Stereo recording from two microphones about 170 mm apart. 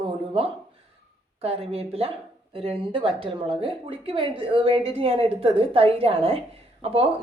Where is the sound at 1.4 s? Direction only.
35° right (ahead or behind).